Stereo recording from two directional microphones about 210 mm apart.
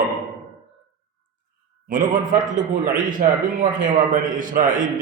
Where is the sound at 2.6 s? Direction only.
40° right (ahead or behind).